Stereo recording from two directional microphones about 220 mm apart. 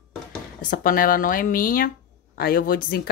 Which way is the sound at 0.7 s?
40° left (ahead or behind).